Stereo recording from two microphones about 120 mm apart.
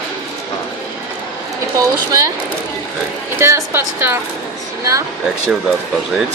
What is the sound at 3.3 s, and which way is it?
Speech, 20° right (ahead or behind).